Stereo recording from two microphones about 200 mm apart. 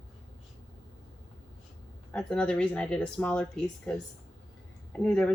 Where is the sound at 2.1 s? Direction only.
5° left (ahead or behind).